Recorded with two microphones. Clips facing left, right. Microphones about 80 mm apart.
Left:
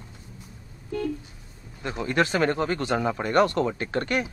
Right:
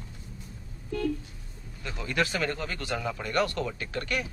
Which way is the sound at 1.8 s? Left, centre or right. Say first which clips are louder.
Left 5 dB; left.